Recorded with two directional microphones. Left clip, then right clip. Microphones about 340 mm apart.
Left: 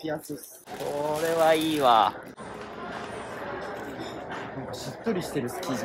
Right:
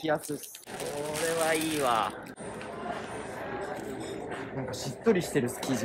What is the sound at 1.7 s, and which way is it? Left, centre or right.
Speech, centre.